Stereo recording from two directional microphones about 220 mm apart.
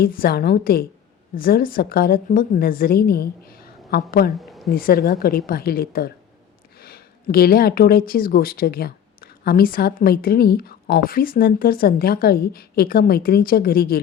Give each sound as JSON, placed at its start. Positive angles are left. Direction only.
{"t": 0.0, "sound": "speech", "side_deg": 40}
{"t": 4.4, "sound": "a sound", "side_deg": 0}
{"t": 4.7, "sound": "speech", "side_deg": 40}